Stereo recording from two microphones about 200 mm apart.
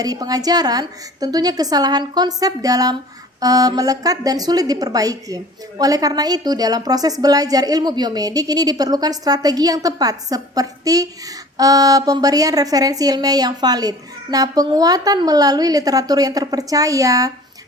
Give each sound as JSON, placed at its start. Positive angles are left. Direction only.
{"t": 0.0, "sound": "a woman's voice", "side_deg": -20}